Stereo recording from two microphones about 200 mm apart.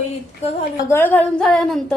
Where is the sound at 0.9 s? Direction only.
10° left (ahead or behind).